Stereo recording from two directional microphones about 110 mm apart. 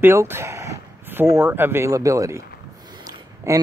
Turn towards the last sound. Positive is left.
turn(degrees=-30)  # may be behind; listen again after turning